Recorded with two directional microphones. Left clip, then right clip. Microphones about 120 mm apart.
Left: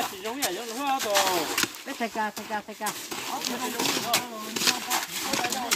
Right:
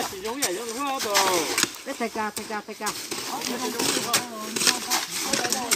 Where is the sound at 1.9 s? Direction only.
60° left (ahead or behind).